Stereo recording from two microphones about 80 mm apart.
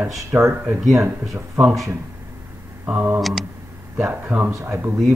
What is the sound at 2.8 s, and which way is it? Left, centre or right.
Speech, centre.